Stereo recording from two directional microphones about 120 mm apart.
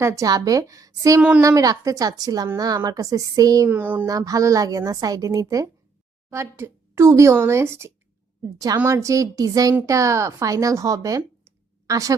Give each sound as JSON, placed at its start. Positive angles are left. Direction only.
{"t": 0.0, "sound": "a woman's voice", "side_deg": -25}
{"t": 3.7, "sound": "speech", "side_deg": -15}
{"t": 4.0, "sound": "a woman's voice", "side_deg": -30}
{"t": 11.4, "sound": "a sound", "side_deg": -30}